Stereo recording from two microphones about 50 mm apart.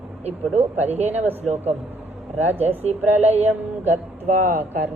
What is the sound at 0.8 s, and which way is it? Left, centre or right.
Speech, right.